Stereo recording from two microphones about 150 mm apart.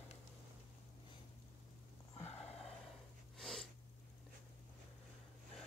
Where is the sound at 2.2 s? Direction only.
45° left (ahead or behind).